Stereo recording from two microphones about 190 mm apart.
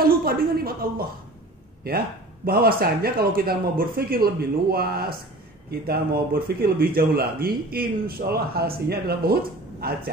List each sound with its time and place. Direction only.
0.0 s a man's voice: 50° right (ahead or behind)